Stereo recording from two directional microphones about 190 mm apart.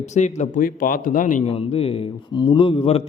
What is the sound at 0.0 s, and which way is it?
A man's voice, 40° left (ahead or behind).